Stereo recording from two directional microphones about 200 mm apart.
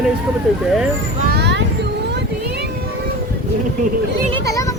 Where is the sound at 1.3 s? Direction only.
55° right (ahead or behind).